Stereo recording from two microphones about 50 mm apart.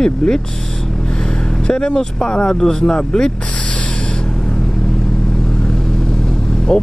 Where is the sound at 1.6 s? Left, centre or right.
Centre.